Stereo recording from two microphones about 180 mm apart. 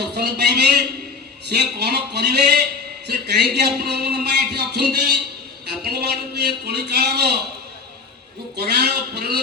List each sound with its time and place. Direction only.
0.0 s a sound: 65° right (ahead or behind)
1.5 s a man's voice: 65° right (ahead or behind)
8.5 s a man's voice: 65° right (ahead or behind)